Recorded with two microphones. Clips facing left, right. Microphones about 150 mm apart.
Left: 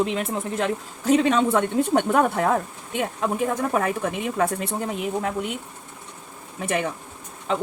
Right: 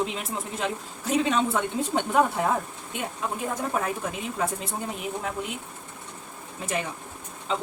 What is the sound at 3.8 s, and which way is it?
Speech, 65° left (ahead or behind).